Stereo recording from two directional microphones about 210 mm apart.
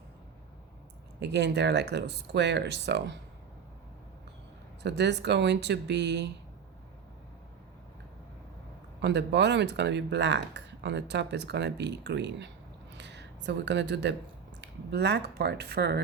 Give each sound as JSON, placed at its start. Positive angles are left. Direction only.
{"t": 1.2, "sound": "speech", "side_deg": -55}
{"t": 4.8, "sound": "speech", "side_deg": -55}
{"t": 9.0, "sound": "speech", "side_deg": -55}